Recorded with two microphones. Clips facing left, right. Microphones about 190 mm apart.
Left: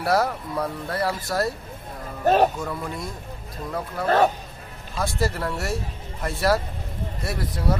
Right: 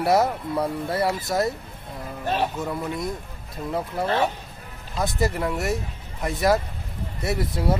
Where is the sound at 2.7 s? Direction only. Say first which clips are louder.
Right 3 dB; 20° right (ahead or behind).